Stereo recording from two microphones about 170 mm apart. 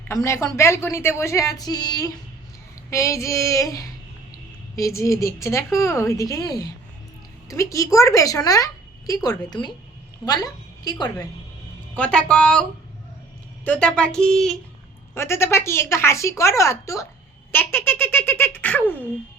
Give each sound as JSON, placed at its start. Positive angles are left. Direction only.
{"t": 0.1, "sound": "a woman's voice", "side_deg": 20}
{"t": 11.9, "sound": "a woman's voice", "side_deg": 5}
{"t": 13.7, "sound": "speech", "side_deg": 5}
{"t": 15.1, "sound": "a woman's voice", "side_deg": 15}